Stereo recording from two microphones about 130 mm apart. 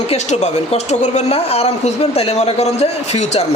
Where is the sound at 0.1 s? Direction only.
60° left (ahead or behind).